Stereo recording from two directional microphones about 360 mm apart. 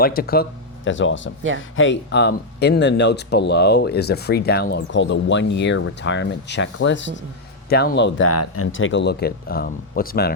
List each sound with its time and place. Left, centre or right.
0.0 s speech: left